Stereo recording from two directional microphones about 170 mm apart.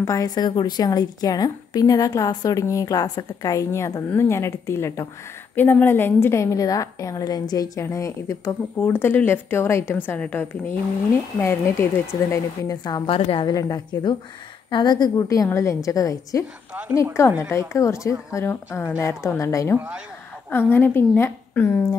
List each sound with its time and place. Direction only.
0.0 s a woman's voice: 20° left (ahead or behind)